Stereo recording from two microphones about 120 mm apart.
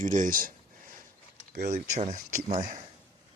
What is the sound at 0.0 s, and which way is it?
Speech, 90° right.